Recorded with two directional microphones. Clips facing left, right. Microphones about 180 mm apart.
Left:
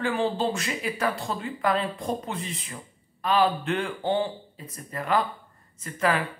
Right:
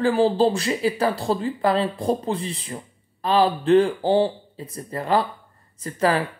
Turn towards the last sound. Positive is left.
turn(degrees=-35)  # may be behind; listen again after turning